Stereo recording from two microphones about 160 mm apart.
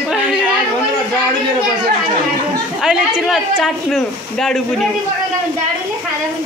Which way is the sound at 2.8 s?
5° right (ahead or behind).